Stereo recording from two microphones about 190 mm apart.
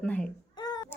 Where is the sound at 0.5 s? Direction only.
20° left (ahead or behind).